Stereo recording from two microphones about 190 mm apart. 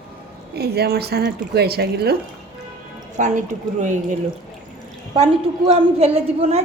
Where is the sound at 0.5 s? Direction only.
55° right (ahead or behind).